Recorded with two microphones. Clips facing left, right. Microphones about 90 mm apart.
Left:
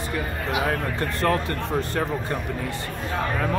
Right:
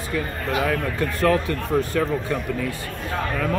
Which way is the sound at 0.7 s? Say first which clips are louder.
Right 2 dB; 35° left (ahead or behind).